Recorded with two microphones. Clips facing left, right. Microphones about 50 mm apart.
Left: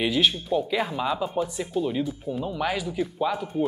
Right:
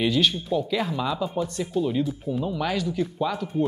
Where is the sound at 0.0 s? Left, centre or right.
Centre.